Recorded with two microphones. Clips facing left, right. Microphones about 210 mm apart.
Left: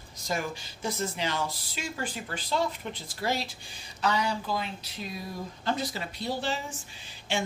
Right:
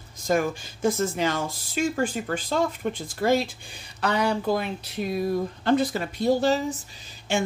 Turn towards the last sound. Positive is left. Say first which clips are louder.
# right 5 dB
turn(degrees=-45)  # may be behind; listen again after turning